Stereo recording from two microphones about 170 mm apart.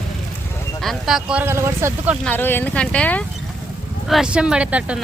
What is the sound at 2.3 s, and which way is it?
Speech, 10° left (ahead or behind).